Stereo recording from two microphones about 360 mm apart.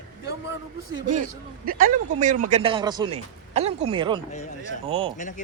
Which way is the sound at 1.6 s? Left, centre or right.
Right.